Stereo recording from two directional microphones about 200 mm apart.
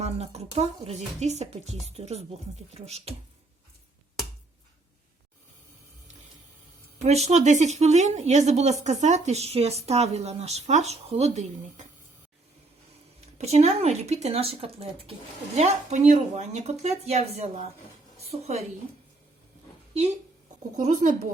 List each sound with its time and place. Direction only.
0.0 s a woman's voice: 30° right (ahead or behind)
7.0 s a woman's voice: 35° right (ahead or behind)
13.4 s a woman's voice: 35° right (ahead or behind)
20.7 s a woman's voice: 40° right (ahead or behind)